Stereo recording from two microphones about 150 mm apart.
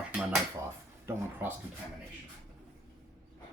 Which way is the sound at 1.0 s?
15° right (ahead or behind).